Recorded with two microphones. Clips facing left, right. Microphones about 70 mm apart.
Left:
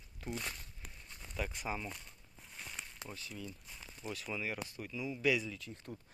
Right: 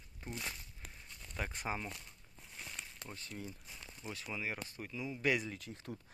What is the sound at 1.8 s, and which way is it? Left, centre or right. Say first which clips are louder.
Speech: left 1 dB; centre.